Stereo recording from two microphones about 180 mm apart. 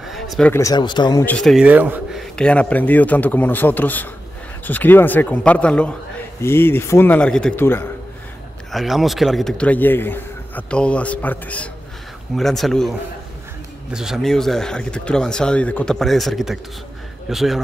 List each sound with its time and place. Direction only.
0.0 s a sound: centre (ahead or behind)
0.5 s speech: 15° left (ahead or behind)
1.2 s speech: 5° left (ahead or behind)
2.3 s a man's voice: 5° left (ahead or behind)
8.7 s a man's voice: centre (ahead or behind)
13.9 s speech: centre (ahead or behind)